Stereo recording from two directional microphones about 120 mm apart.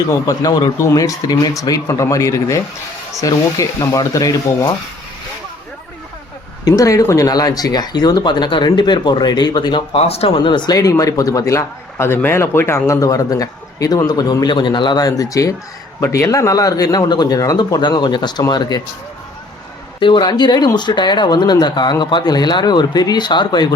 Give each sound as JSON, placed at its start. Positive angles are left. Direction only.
{"t": 0.1, "sound": "speech", "side_deg": 30}
{"t": 6.7, "sound": "speech", "side_deg": 30}
{"t": 10.0, "sound": "speech", "side_deg": 55}
{"t": 20.0, "sound": "speech", "side_deg": 40}